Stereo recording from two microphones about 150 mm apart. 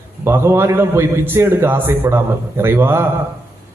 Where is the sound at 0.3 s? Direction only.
15° right (ahead or behind).